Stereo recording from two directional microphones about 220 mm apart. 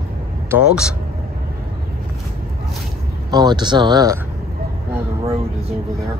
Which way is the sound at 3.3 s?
20° right (ahead or behind).